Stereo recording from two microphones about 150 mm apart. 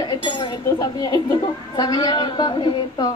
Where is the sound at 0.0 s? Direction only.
30° left (ahead or behind).